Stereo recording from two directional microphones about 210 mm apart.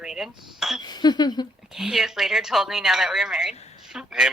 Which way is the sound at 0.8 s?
20° left (ahead or behind).